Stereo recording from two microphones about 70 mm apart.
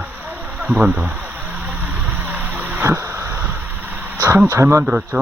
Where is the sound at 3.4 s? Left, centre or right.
Right.